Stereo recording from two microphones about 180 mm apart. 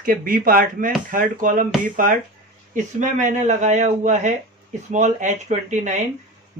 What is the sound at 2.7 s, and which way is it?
Speech, 45° right (ahead or behind).